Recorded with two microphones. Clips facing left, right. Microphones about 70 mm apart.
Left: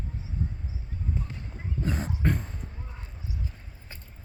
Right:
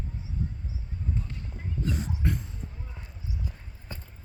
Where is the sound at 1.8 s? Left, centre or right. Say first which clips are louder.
Left 2 dB; left.